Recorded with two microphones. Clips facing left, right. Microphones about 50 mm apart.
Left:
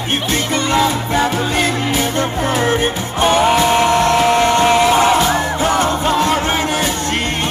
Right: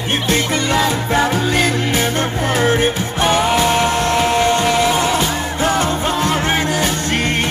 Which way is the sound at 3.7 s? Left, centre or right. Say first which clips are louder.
Left 3 dB; left.